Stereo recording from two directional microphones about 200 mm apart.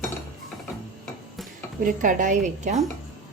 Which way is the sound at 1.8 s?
45° right (ahead or behind).